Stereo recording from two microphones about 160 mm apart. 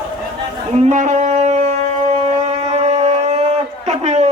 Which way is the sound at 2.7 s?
45° right (ahead or behind).